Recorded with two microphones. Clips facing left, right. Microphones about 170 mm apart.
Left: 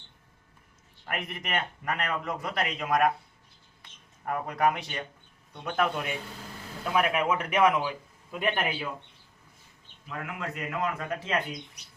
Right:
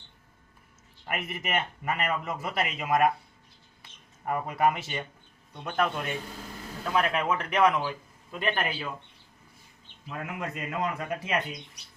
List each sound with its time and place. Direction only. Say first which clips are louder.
1.0 s a man's voice: right 2 dB; 5° right (ahead or behind)
4.3 s a man's voice: right 1 dB; 5° right (ahead or behind); by 8.9 s 10° left (ahead or behind)
10.1 s a man's voice: right 1 dB; 20° right (ahead or behind)